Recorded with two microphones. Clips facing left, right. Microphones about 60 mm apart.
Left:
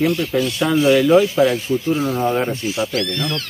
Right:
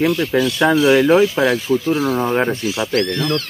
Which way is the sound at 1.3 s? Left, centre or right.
Right.